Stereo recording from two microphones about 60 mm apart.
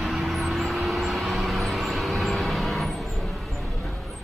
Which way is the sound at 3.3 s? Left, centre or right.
Centre.